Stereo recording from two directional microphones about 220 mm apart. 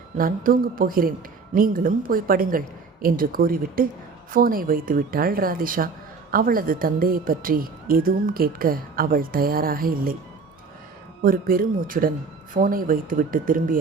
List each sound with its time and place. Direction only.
0.2 s speech: 40° right (ahead or behind)
11.2 s speech: 40° right (ahead or behind)